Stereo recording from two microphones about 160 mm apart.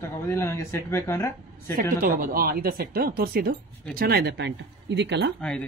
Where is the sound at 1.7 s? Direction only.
65° right (ahead or behind); by 5.3 s 90° right.